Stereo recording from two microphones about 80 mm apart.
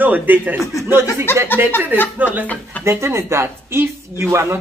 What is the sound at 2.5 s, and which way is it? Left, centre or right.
Speech, centre.